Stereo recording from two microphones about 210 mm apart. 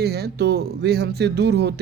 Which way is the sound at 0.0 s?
50° right (ahead or behind).